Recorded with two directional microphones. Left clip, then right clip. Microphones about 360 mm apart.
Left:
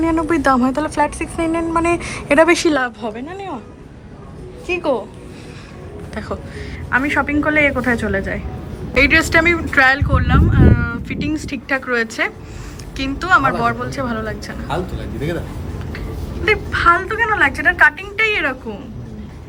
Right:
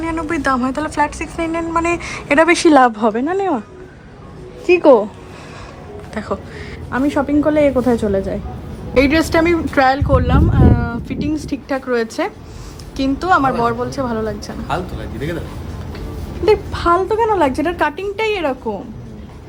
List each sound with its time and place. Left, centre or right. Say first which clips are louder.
0.0 s speech: left 3 dB; centre; by 3.2 s right
4.6 s a woman's voice: right 9 dB; centre
6.9 s speech: even; centre
16.3 s speech: right 2 dB; centre